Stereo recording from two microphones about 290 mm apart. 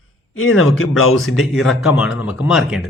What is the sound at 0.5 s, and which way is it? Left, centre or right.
Speech, left.